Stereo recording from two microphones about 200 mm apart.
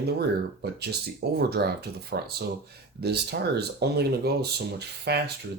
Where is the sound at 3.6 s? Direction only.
55° right (ahead or behind).